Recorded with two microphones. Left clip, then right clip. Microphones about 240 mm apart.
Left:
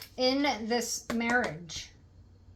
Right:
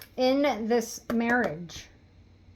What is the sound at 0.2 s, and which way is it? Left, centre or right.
Speech, right.